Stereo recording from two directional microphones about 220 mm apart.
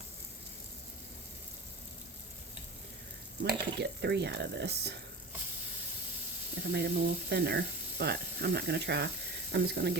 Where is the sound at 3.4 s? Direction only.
50° right (ahead or behind).